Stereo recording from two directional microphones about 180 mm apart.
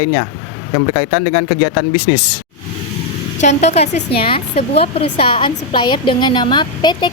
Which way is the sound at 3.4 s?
40° left (ahead or behind).